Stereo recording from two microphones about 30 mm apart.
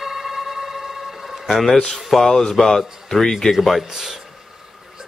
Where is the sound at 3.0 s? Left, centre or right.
Centre.